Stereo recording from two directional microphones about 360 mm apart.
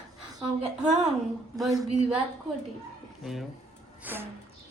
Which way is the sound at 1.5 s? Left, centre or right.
Centre.